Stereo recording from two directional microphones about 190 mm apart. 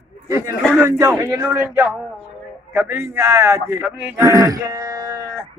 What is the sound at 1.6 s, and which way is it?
A man's voice, 5° right (ahead or behind).